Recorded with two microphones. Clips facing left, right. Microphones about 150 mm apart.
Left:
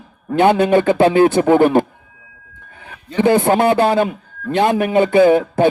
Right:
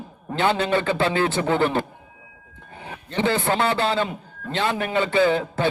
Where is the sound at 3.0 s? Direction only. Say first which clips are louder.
Left 9 dB; 15° left (ahead or behind).